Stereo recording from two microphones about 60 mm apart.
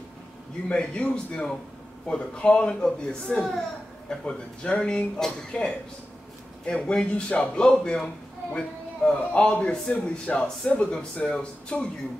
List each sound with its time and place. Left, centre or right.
0.7 s a man's voice: centre
9.2 s a man's voice: left